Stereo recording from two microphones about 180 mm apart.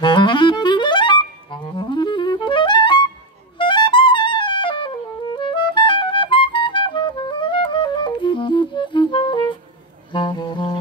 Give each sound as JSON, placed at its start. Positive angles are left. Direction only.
{"t": 0.0, "sound": "clarinet", "side_deg": 25}
{"t": 3.5, "sound": "music", "side_deg": 25}